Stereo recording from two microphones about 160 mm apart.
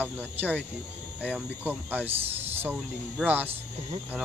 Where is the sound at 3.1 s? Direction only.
10° right (ahead or behind).